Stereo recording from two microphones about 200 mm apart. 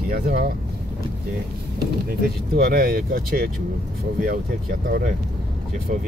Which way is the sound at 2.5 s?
45° right (ahead or behind).